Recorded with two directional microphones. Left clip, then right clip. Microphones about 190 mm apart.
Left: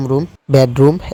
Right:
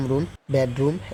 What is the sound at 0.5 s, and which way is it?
Speech, 40° left (ahead or behind).